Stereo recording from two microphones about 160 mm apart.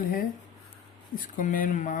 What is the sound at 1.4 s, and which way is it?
Speech, 55° left (ahead or behind).